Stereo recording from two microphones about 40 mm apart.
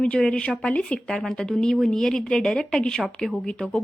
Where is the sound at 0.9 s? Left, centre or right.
Centre.